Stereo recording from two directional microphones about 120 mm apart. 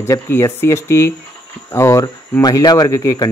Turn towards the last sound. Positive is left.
turn(degrees=25)  # may be behind; listen again after turning